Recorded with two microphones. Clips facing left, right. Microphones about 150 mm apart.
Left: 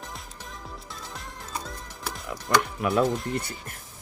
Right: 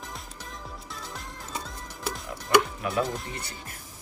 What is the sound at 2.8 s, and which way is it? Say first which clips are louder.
Speech: left 5 dB; 60° left (ahead or behind).